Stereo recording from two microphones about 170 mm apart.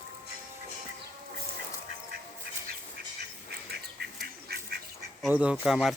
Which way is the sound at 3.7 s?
70° right (ahead or behind).